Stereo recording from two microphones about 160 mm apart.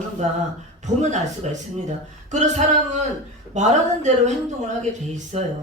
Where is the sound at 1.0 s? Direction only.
50° right (ahead or behind).